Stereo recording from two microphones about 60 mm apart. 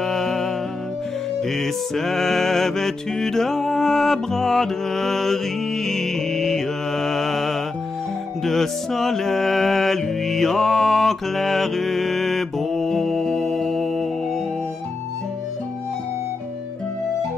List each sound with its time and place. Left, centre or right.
0.0 s music: centre